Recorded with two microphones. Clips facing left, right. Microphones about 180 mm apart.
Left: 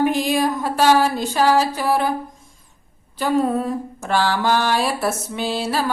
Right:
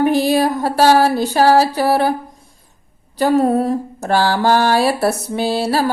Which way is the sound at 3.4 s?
40° right (ahead or behind).